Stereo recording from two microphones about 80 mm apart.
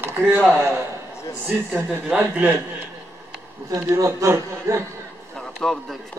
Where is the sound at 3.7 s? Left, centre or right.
Right.